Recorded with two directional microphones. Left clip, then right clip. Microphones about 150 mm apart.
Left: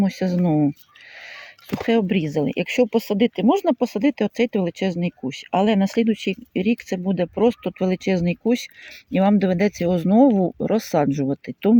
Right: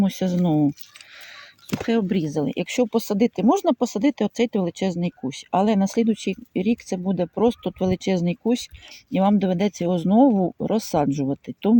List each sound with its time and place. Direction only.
0.0 s speech: 10° left (ahead or behind)
1.8 s speech: 25° left (ahead or behind)